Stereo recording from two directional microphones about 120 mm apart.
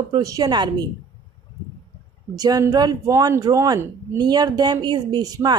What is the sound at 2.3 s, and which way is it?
A woman's voice, 35° right (ahead or behind).